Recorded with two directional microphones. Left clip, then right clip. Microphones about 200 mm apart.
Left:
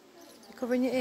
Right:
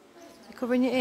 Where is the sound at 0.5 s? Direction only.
10° right (ahead or behind).